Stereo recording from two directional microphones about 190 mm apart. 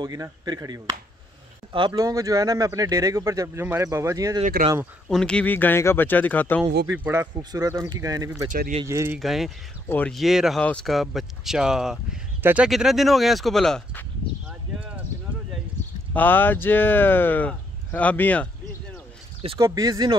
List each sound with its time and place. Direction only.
0.0 s speech: 20° right (ahead or behind)
5.1 s speech: 5° left (ahead or behind)
6.9 s speech: 10° right (ahead or behind)
8.5 s speech: 45° right (ahead or behind)
8.8 s speech: 15° right (ahead or behind)
9.2 s speech: centre (ahead or behind)
16.1 s speech: 10° left (ahead or behind)
19.6 s speech: 20° right (ahead or behind)